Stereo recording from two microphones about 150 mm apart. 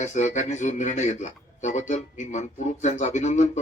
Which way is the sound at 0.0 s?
55° left (ahead or behind).